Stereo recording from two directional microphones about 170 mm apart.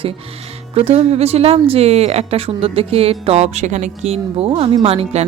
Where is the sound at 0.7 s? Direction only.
35° right (ahead or behind).